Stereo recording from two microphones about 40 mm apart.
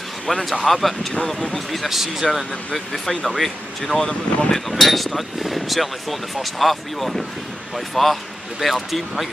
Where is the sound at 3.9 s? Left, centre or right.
Centre.